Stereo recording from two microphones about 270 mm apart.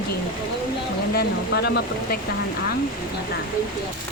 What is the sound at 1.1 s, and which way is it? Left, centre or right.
Speech, left.